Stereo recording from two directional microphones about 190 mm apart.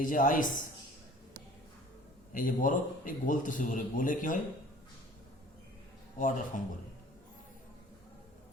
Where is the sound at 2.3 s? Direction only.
45° left (ahead or behind).